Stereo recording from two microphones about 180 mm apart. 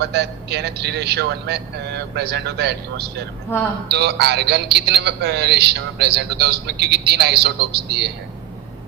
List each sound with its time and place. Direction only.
0.0 s a man's voice: 65° right (ahead or behind)
3.5 s speech: 10° left (ahead or behind)
3.8 s a man's voice: 65° right (ahead or behind)